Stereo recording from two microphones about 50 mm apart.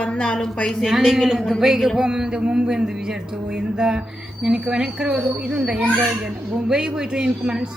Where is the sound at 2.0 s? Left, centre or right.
Centre.